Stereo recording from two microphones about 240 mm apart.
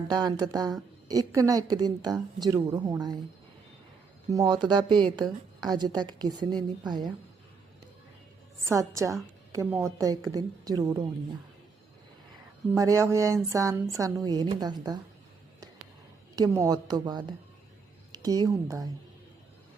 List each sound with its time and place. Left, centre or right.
0.1 s a woman's voice: centre
4.3 s a woman's voice: centre
8.6 s a woman's voice: centre
12.7 s a woman's voice: centre
16.3 s a woman's voice: centre